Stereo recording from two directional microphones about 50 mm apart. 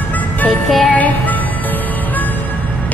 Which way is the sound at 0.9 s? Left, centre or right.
Left.